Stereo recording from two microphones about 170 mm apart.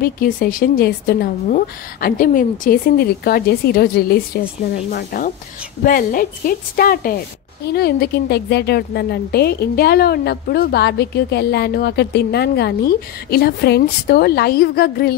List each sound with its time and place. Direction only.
0.0 s a woman's voice: 60° left (ahead or behind)